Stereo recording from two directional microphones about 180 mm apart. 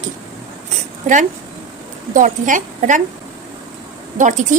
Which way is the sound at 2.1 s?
45° right (ahead or behind).